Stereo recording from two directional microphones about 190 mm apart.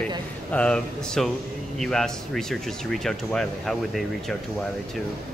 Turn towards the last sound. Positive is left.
turn(degrees=0)  # may be behind; listen again after turning